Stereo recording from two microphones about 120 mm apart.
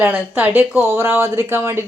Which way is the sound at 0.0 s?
15° right (ahead or behind).